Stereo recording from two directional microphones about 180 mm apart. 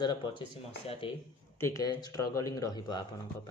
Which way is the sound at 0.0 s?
25° left (ahead or behind).